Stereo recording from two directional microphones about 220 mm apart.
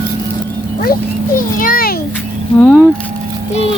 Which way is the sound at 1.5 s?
40° left (ahead or behind).